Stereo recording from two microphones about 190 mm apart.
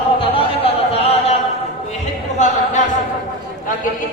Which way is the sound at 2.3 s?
40° left (ahead or behind).